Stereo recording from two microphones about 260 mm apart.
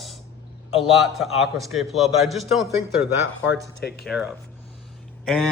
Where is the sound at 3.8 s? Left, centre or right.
Left.